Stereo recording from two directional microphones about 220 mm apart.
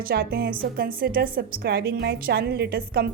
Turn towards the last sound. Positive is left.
turn(degrees=-45)  # may be behind; listen again after turning